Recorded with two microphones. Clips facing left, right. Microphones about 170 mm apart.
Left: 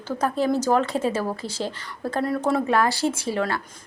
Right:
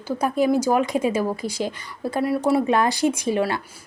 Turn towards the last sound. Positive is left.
turn(degrees=-20)  # may be behind; listen again after turning